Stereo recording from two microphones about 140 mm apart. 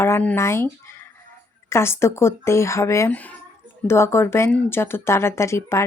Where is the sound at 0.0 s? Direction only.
15° left (ahead or behind).